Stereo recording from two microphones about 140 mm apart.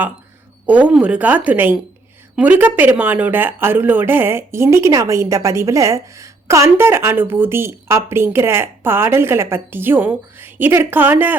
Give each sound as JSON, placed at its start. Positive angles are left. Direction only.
{"t": 0.7, "sound": "speech", "side_deg": -10}